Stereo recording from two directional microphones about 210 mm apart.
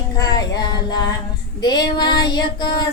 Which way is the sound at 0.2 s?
20° left (ahead or behind).